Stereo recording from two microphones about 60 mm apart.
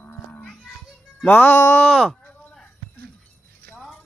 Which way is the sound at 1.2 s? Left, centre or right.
Left.